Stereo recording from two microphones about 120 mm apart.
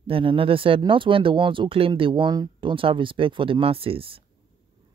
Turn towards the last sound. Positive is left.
turn(degrees=-50)  # may be behind; listen again after turning